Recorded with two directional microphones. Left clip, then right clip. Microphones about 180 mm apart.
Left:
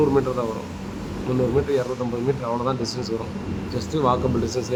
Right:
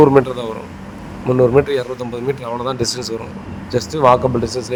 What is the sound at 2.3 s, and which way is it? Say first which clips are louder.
A man's voice: right 3 dB; 40° right (ahead or behind).